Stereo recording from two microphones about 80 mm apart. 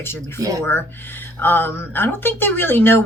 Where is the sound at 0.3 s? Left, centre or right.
Right.